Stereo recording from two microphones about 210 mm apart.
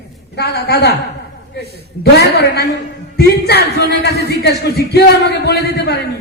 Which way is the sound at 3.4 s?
50° left (ahead or behind).